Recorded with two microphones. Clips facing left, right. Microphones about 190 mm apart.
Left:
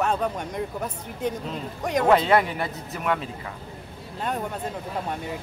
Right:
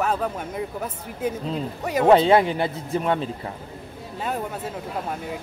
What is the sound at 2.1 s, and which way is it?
Speech, 25° right (ahead or behind).